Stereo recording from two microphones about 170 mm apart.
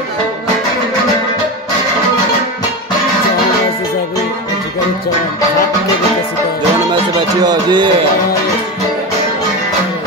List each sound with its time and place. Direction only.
6.9 s music: 25° right (ahead or behind)